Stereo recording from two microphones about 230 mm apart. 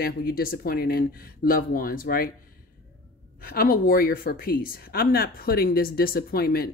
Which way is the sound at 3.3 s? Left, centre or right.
Left.